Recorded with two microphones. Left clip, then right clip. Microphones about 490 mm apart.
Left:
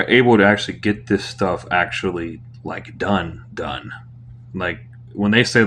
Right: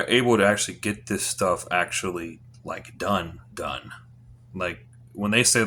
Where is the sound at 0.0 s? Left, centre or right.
Right.